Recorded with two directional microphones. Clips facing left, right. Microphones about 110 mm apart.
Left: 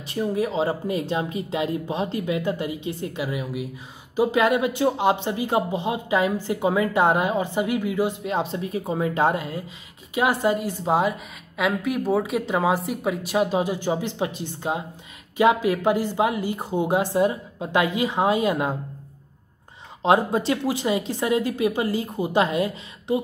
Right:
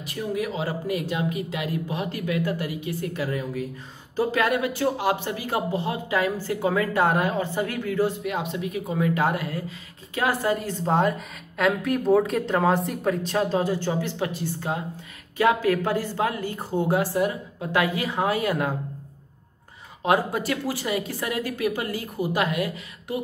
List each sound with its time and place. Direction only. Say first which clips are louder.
0.0 s a woman's voice: left 4 dB; 30° left (ahead or behind)
20.0 s speech: left 3 dB; 25° left (ahead or behind)